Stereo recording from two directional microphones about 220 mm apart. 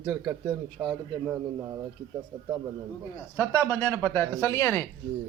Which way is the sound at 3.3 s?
10° left (ahead or behind).